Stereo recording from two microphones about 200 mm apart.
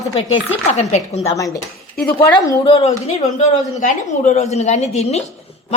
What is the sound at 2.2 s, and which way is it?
A woman's voice, 20° left (ahead or behind).